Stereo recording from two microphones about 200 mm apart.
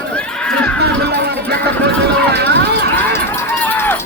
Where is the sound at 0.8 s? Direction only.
55° right (ahead or behind).